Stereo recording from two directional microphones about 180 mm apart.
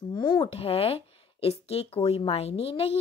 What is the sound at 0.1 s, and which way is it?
A woman's voice, 25° left (ahead or behind).